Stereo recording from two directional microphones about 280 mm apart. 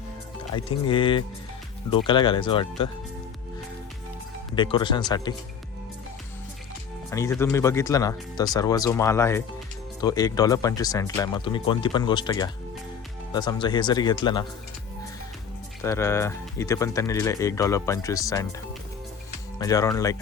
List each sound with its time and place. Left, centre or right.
0.5 s speech: centre
4.5 s speech: centre
7.1 s speech: centre
15.8 s speech: centre
19.5 s speech: centre